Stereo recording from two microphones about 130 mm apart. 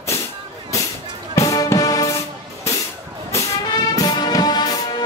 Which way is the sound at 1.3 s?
25° left (ahead or behind).